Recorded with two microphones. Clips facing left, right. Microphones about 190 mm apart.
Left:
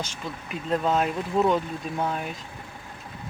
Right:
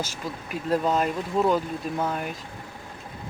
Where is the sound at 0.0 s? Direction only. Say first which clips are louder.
Right 2 dB; 5° right (ahead or behind).